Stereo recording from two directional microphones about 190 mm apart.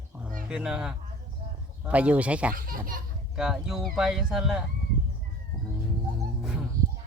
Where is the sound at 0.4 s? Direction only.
5° right (ahead or behind).